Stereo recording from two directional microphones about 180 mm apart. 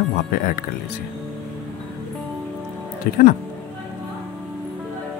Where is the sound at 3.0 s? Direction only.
55° left (ahead or behind).